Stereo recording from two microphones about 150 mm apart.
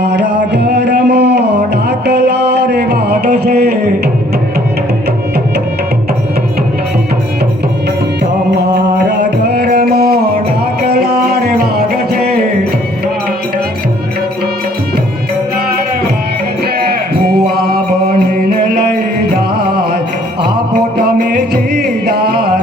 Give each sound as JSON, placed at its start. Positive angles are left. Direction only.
{"t": 0.5, "sound": "music", "side_deg": -90}
{"t": 3.3, "sound": "a sound", "side_deg": -90}
{"t": 9.5, "sound": "music", "side_deg": -90}
{"t": 16.8, "sound": "sheep", "side_deg": -90}
{"t": 17.7, "sound": "music", "side_deg": -90}
{"t": 21.0, "sound": "music", "side_deg": -90}